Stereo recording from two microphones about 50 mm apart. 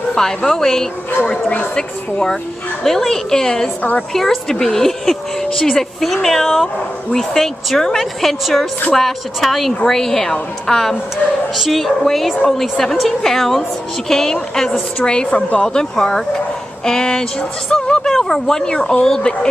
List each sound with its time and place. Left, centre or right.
0.1 s speech: centre
1.2 s a woman's voice: centre